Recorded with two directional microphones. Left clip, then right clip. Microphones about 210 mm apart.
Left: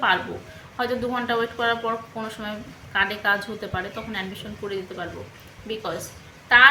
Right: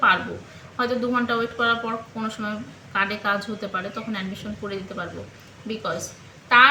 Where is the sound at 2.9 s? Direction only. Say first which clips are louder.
Left 1 dB; 5° left (ahead or behind).